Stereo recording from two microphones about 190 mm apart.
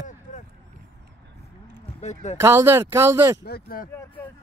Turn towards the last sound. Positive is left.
turn(degrees=50)  # may be behind; listen again after turning